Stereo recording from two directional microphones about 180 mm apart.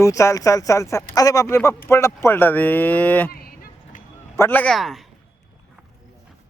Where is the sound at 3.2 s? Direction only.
55° left (ahead or behind).